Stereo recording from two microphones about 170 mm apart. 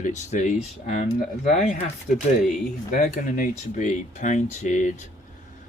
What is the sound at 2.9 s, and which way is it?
Speech, 55° left (ahead or behind).